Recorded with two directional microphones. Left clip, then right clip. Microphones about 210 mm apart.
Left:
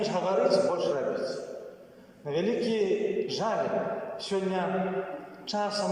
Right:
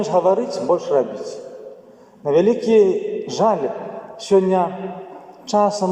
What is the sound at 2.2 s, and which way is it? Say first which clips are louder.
A man's voice: right 13 dB; 55° right (ahead or behind).